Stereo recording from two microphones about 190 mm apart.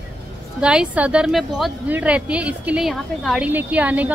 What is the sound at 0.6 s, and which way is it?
A woman's voice, 5° right (ahead or behind).